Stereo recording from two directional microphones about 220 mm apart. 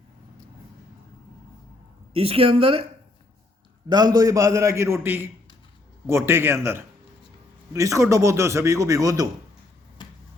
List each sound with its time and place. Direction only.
2.1 s a woman's voice: 25° right (ahead or behind)
3.8 s a man's voice: 20° right (ahead or behind)
10.0 s finger snapping: 20° left (ahead or behind)